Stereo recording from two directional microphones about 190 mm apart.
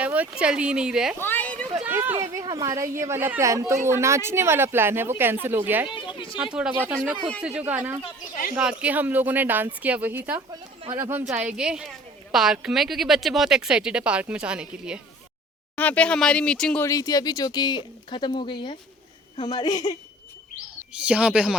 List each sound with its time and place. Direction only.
0.0 s speech: 5° right (ahead or behind)
1.2 s a sound: 10° left (ahead or behind)
1.7 s a woman's voice: 10° right (ahead or behind)
5.9 s a sound: 25° left (ahead or behind)
6.4 s a woman's voice: 5° right (ahead or behind)
10.5 s speech: 20° right (ahead or behind)
15.7 s speech: 10° left (ahead or behind)
16.8 s speech: 15° left (ahead or behind)
20.9 s speech: 5° right (ahead or behind)